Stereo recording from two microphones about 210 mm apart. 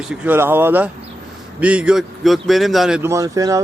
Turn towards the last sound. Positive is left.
turn(degrees=-15)  # may be behind; listen again after turning